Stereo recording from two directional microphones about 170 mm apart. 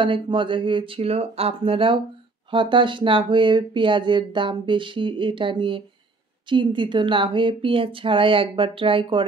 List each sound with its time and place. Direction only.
0.0 s a woman's voice: 30° right (ahead or behind)